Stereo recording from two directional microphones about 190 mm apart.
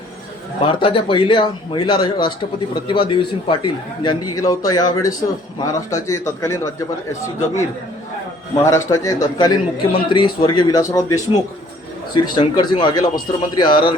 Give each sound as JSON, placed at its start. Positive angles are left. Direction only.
{"t": 0.6, "sound": "a man's voice", "side_deg": 25}
{"t": 8.6, "sound": "a man's voice", "side_deg": 15}